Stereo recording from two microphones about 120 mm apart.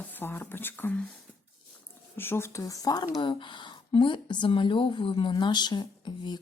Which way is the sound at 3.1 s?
40° left (ahead or behind).